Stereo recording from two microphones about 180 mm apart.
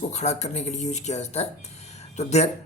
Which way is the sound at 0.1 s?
40° left (ahead or behind).